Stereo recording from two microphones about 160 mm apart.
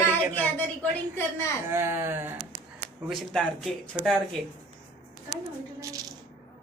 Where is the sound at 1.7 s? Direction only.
15° right (ahead or behind).